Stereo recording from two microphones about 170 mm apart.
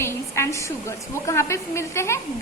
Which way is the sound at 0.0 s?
15° left (ahead or behind).